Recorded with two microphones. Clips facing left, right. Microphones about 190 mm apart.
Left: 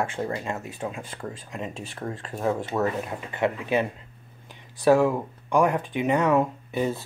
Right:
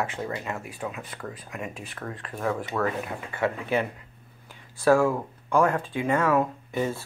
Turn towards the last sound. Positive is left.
turn(degrees=15)  # may be behind; listen again after turning